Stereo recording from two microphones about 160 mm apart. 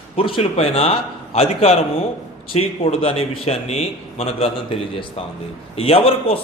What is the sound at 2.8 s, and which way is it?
A man's voice, 40° left (ahead or behind).